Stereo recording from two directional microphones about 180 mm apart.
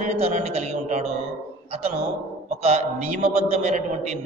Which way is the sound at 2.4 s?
35° right (ahead or behind).